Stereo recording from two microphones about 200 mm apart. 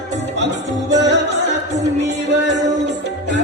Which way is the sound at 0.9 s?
60° right (ahead or behind).